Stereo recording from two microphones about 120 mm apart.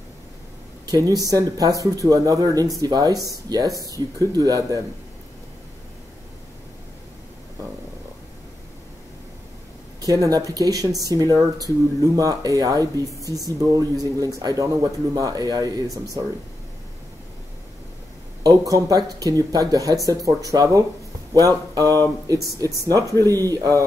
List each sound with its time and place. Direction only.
0.8 s speech: 30° right (ahead or behind)
9.9 s speech: 30° right (ahead or behind)
18.4 s speech: 30° right (ahead or behind)